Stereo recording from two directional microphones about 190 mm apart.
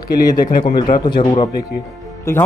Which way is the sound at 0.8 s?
25° left (ahead or behind).